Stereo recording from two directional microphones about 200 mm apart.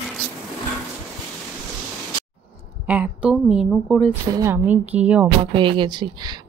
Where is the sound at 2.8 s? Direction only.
5° right (ahead or behind).